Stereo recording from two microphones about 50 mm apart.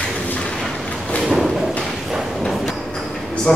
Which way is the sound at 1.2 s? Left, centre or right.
Centre.